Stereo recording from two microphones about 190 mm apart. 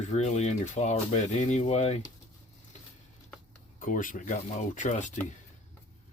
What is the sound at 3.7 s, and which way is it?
Speech, 45° left (ahead or behind).